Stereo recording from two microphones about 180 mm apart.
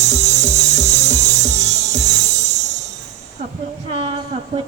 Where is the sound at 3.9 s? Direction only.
30° right (ahead or behind).